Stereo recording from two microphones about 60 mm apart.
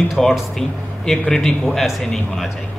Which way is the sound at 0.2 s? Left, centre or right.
Centre.